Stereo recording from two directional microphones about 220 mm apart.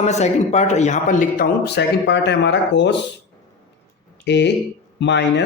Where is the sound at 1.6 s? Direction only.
50° left (ahead or behind).